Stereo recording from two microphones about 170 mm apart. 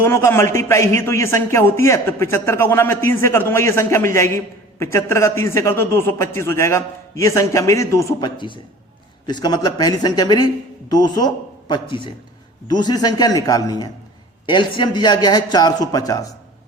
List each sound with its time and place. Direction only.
0.0 s a man's voice: 15° left (ahead or behind)